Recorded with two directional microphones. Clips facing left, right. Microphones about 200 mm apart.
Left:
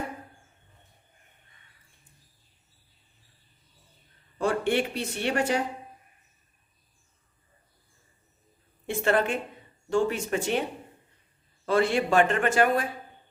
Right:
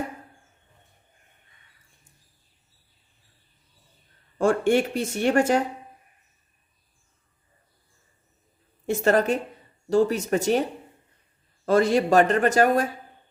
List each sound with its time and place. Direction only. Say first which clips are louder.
4.4 s speech: right 5 dB; 45° right (ahead or behind)
8.9 s speech: right 4 dB; 40° right (ahead or behind)